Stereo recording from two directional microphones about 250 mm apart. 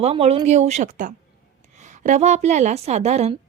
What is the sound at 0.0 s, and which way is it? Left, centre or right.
A woman's voice, right.